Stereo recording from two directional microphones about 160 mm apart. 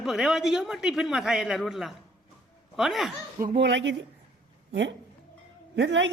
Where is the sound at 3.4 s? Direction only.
75° right (ahead or behind).